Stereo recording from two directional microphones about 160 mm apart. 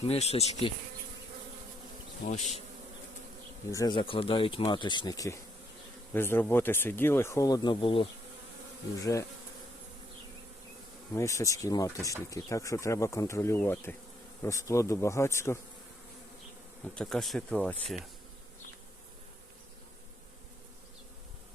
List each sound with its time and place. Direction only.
0.0 s speech: 40° left (ahead or behind)
2.2 s bee: 50° left (ahead or behind)
3.7 s speech: 20° left (ahead or behind)
3.9 s speech: 35° left (ahead or behind)
9.0 s speech: 20° left (ahead or behind)
11.1 s speech: 20° left (ahead or behind)
16.9 s speech: 5° left (ahead or behind)